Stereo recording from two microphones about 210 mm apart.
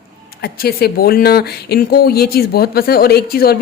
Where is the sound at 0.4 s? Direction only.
45° left (ahead or behind).